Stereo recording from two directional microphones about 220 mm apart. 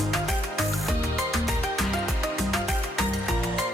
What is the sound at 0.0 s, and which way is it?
Music, centre (ahead or behind).